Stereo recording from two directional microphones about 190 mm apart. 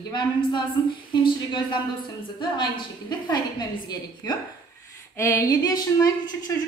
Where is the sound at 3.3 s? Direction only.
20° left (ahead or behind).